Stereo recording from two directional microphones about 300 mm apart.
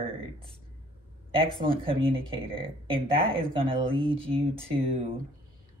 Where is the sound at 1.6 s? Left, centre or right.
Centre.